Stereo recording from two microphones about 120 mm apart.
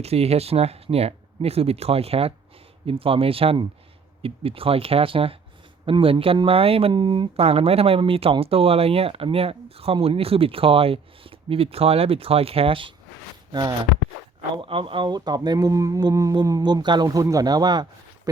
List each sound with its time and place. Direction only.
0.0 s speech: 60° right (ahead or behind)
13.5 s speech: 35° right (ahead or behind)
14.5 s speech: 45° right (ahead or behind)